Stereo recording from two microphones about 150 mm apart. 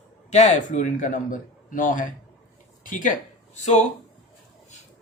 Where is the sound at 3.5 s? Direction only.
50° left (ahead or behind).